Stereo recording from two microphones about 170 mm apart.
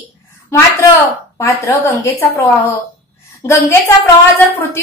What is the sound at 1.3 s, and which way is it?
A woman's voice, 15° left (ahead or behind).